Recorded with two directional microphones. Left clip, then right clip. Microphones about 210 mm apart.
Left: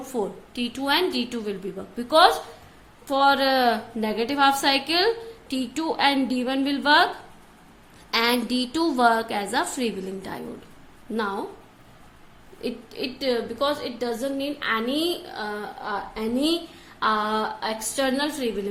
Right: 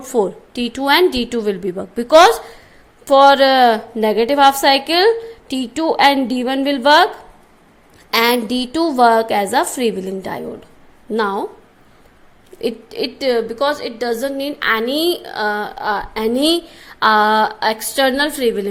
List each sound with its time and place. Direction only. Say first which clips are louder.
0.1 s a woman's voice: right 12 dB; 35° right (ahead or behind)
8.1 s a woman's voice: right 8 dB; 30° right (ahead or behind)
12.5 s a woman's voice: right 10 dB; 35° right (ahead or behind)